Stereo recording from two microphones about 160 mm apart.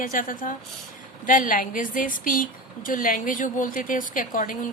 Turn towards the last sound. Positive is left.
turn(degrees=55)  # may be behind; listen again after turning